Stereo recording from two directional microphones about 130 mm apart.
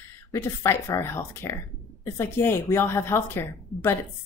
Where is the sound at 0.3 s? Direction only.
20° left (ahead or behind).